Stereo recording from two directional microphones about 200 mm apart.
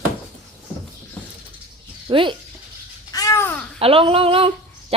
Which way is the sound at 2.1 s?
25° right (ahead or behind).